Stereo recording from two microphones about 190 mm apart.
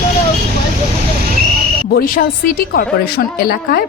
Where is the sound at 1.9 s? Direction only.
50° left (ahead or behind).